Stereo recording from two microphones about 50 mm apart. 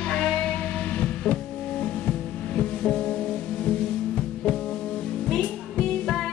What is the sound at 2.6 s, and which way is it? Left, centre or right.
Music, centre.